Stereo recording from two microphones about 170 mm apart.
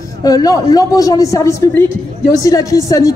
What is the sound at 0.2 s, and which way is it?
A man's voice, 20° left (ahead or behind).